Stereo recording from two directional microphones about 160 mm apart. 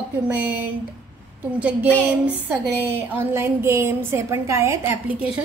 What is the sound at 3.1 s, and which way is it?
A woman's voice, 15° right (ahead or behind).